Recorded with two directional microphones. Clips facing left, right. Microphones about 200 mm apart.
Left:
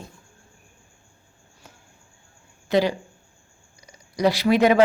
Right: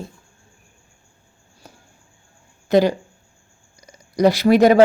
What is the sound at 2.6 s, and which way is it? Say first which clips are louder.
Speech: right 5 dB; 45° right (ahead or behind).